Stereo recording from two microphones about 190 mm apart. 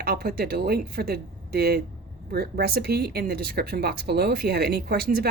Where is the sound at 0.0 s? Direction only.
50° right (ahead or behind).